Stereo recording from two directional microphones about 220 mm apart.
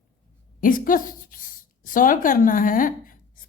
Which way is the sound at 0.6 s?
40° left (ahead or behind).